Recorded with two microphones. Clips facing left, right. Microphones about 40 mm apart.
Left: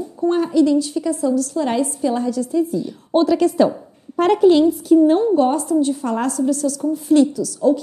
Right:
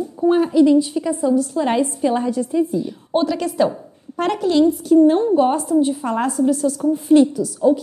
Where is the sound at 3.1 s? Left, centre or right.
Centre.